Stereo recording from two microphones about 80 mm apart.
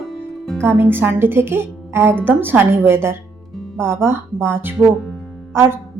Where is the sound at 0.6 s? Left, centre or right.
Right.